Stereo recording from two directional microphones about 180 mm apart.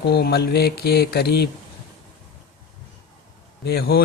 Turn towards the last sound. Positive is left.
turn(degrees=60)  # may be behind; listen again after turning